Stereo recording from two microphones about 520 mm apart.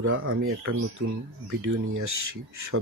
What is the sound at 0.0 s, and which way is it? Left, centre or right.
Speech, right.